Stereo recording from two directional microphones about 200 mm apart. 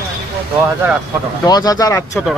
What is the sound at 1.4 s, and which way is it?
Speech, 20° left (ahead or behind).